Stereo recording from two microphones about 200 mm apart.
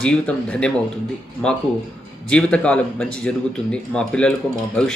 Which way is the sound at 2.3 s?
5° left (ahead or behind).